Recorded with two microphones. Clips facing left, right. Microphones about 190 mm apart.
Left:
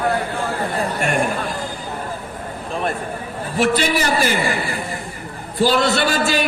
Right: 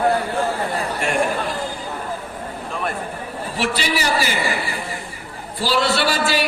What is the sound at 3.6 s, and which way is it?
Speech, 50° left (ahead or behind).